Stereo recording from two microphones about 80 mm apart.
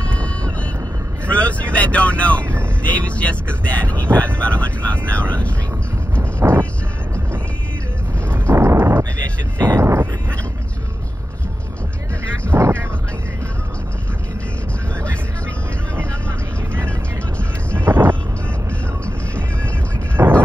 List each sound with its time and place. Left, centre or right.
0.0 s vehicle: centre
2.4 s vehicle: right
2.8 s speech: centre
6.5 s music: centre
8.3 s a sound: right
12.4 s vehicle: right
17.7 s vehicle: right
20.2 s a sound: right